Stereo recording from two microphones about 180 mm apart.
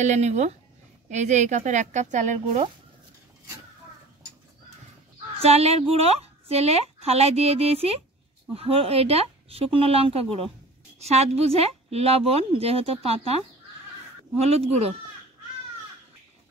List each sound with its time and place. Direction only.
0.0 s a woman's voice: 40° right (ahead or behind)
5.4 s a woman's voice: 35° right (ahead or behind)
14.4 s a woman's voice: 35° right (ahead or behind)